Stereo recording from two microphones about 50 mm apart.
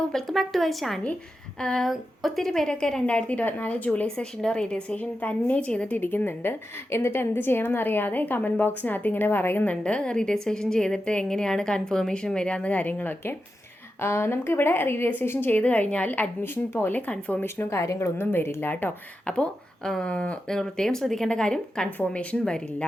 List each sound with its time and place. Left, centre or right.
0.1 s a woman's voice: centre
3.1 s speech: left
4.0 s a woman's voice: centre
4.9 s speech: left
6.0 s a woman's voice: left
9.6 s a woman's voice: left
14.0 s a woman's voice: left
15.6 s a woman's voice: left
17.4 s speech: left
18.2 s a woman's voice: left
19.2 s speech: centre
20.5 s a woman's voice: centre
21.9 s speech: left